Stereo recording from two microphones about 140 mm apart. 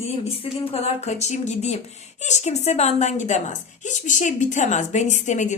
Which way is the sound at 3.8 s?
60° left (ahead or behind).